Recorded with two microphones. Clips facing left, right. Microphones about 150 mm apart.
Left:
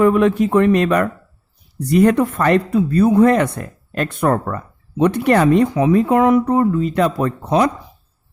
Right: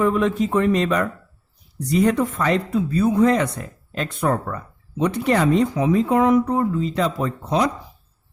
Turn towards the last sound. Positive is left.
turn(degrees=60)  # may be behind; listen again after turning